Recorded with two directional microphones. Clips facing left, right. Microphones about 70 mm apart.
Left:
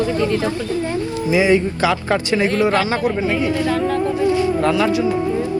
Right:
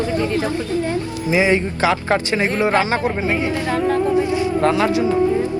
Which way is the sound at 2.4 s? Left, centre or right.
Right.